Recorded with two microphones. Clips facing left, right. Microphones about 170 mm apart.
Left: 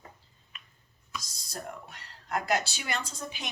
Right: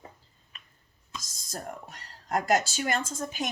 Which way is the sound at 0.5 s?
35° right (ahead or behind).